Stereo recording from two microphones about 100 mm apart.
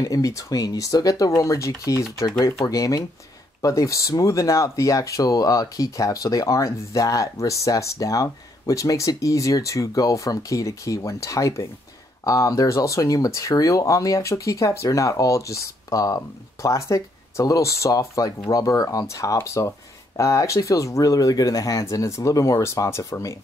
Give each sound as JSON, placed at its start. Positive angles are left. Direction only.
{"t": 0.0, "sound": "speech", "side_deg": 35}